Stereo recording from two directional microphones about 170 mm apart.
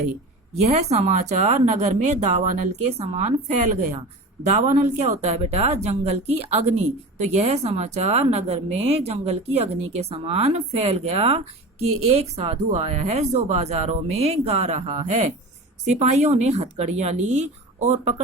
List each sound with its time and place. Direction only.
0.5 s speech: 40° right (ahead or behind)
4.5 s speech: 45° right (ahead or behind)